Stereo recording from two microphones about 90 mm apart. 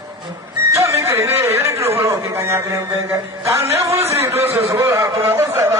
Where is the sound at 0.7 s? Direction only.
30° right (ahead or behind).